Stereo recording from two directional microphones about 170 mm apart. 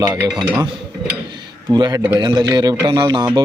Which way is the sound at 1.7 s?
25° right (ahead or behind).